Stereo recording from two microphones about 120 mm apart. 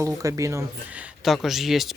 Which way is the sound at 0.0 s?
25° right (ahead or behind).